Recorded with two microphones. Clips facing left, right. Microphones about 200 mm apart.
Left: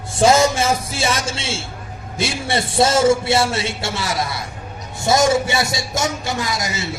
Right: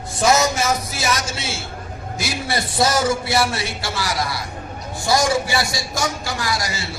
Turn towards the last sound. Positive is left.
turn(degrees=20)  # may be behind; listen again after turning